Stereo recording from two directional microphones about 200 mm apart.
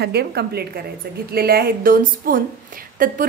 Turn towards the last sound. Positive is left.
turn(degrees=-45)  # may be behind; listen again after turning